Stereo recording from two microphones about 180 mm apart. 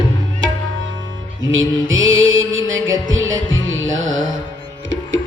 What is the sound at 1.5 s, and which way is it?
Music, 90° right.